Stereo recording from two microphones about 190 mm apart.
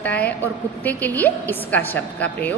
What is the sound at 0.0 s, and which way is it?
A woman's voice, 10° left (ahead or behind).